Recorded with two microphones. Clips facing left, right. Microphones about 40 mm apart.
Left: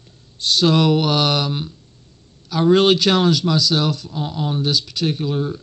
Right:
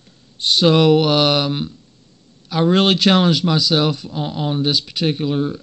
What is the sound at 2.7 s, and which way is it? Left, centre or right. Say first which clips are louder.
Speech: left 1 dB; centre.